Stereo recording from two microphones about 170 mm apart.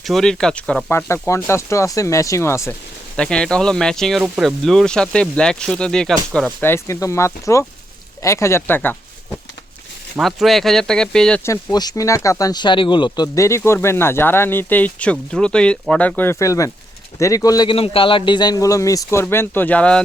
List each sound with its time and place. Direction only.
0.0 s speech: centre (ahead or behind)
3.2 s speech: 5° left (ahead or behind)
10.2 s speech: centre (ahead or behind)
11.4 s a man's voice: 20° left (ahead or behind)